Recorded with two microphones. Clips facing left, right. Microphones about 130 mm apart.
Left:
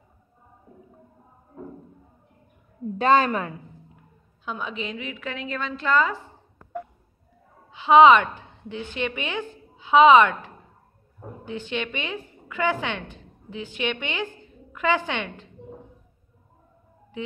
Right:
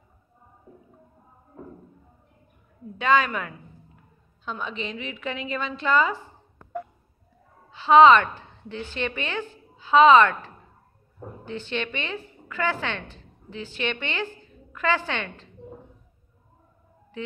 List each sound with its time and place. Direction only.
3.0 s a woman's voice: 35° left (ahead or behind)
4.5 s a woman's voice: 5° left (ahead or behind)
7.7 s a woman's voice: 15° left (ahead or behind)